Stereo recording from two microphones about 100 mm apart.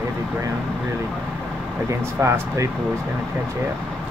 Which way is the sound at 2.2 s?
30° right (ahead or behind).